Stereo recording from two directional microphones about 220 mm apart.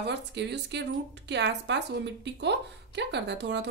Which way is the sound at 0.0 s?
50° right (ahead or behind).